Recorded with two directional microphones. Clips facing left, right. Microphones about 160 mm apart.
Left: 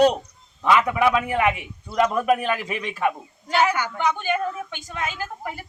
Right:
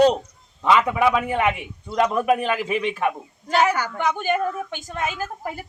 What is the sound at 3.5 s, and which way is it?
A woman's voice, 45° right (ahead or behind).